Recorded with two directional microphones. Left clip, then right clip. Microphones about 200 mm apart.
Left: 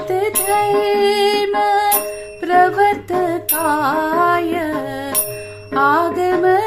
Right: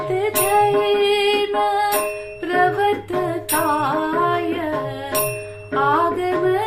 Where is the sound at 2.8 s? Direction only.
55° left (ahead or behind).